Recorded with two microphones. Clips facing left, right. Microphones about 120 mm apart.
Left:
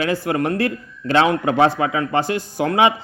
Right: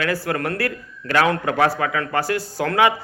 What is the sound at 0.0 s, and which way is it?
A man's voice, 20° left (ahead or behind).